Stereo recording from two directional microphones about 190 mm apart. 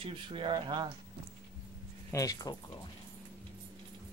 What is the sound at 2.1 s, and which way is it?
Speech, 20° left (ahead or behind).